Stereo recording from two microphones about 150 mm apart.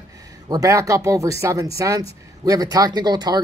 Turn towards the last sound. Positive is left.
turn(degrees=-30)  # may be behind; listen again after turning